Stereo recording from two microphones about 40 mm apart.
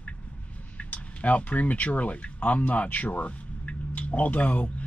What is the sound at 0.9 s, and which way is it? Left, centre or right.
Speech, left.